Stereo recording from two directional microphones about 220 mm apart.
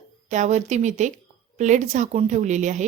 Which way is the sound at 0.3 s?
30° right (ahead or behind).